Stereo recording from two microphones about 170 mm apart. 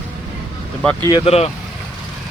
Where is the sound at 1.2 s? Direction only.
35° left (ahead or behind).